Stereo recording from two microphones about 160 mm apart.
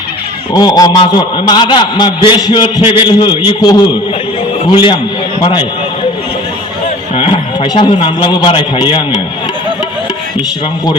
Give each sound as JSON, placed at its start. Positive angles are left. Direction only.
{"t": 0.5, "sound": "a man's voice", "side_deg": 25}
{"t": 7.2, "sound": "a man's voice", "side_deg": 30}